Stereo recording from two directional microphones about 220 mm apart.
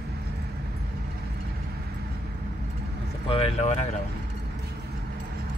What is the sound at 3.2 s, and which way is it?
Speech, 25° left (ahead or behind).